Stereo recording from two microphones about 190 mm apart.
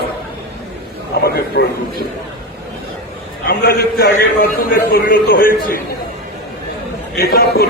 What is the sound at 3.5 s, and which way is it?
A man's voice, 55° left (ahead or behind).